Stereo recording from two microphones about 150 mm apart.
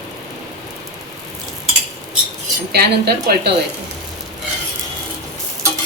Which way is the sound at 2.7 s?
90° right.